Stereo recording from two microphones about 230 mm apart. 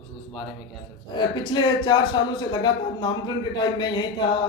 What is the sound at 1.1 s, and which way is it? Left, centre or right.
A man's voice, centre.